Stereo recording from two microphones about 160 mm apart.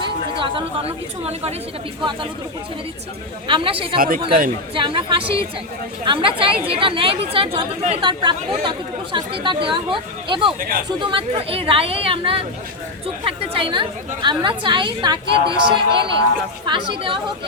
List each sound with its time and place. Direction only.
0.0 s speech: 35° right (ahead or behind)
3.4 s speech: 35° right (ahead or behind)
3.9 s speech: 65° right (ahead or behind)
4.7 s speech: 35° right (ahead or behind)
10.6 s speech: 60° right (ahead or behind)
10.8 s speech: 30° right (ahead or behind)